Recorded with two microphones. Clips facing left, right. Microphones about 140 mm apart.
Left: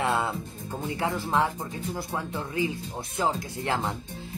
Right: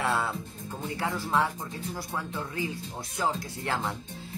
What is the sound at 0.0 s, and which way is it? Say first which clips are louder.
Music: left 2 dB; 15° left (ahead or behind).